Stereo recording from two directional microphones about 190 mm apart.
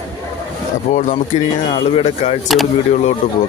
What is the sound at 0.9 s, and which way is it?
A man's voice, 40° left (ahead or behind).